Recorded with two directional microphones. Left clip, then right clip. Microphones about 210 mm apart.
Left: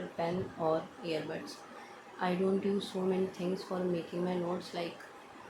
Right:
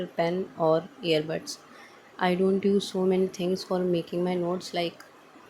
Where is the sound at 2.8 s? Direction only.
35° right (ahead or behind).